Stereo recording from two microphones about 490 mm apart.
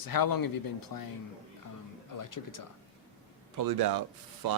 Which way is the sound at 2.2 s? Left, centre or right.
Left.